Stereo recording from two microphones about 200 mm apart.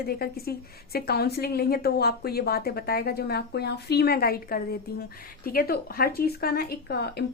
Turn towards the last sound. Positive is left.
turn(degrees=55)  # may be behind; listen again after turning